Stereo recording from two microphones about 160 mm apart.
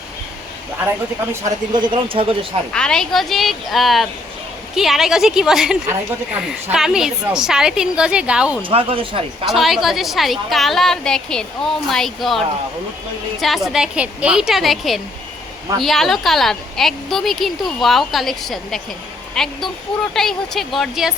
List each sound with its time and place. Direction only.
0.9 s speech: 15° right (ahead or behind)
1.7 s speech: 30° right (ahead or behind)
2.7 s a woman's voice: 5° left (ahead or behind)
8.6 s speech: 35° right (ahead or behind)
9.5 s a woman's voice: centre (ahead or behind)
13.4 s a woman's voice: centre (ahead or behind)